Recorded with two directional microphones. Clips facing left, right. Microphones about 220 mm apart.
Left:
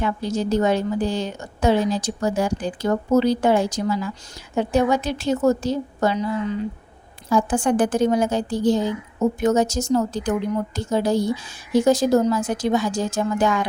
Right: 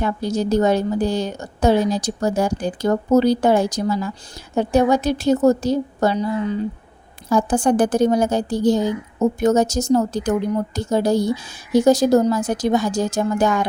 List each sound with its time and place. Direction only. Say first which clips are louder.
0.0 s a woman's voice: right 2 dB; 40° right (ahead or behind)
7.3 s a woman's voice: right 2 dB; 40° right (ahead or behind)